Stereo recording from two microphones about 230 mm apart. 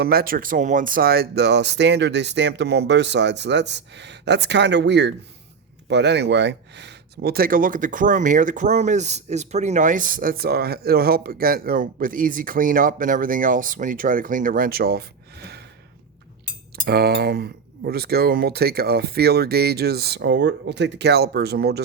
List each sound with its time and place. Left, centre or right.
0.0 s speech: right
16.8 s speech: right